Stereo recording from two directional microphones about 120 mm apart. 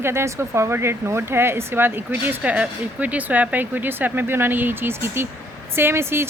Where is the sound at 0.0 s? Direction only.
20° right (ahead or behind).